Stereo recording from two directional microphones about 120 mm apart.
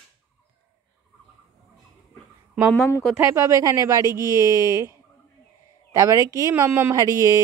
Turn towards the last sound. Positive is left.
turn(degrees=-25)  # may be behind; listen again after turning